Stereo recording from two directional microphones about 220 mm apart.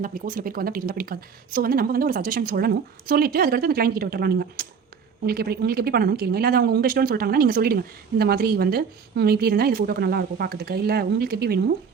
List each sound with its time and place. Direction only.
0.0 s a woman's voice: 40° right (ahead or behind)